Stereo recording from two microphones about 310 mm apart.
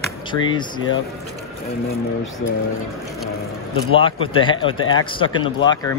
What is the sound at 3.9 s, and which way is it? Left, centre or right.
Speech, centre.